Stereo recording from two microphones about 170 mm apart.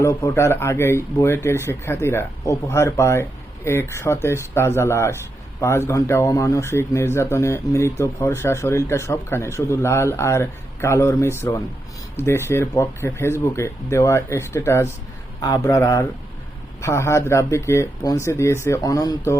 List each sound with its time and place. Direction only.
0.0 s a man's voice: 15° left (ahead or behind)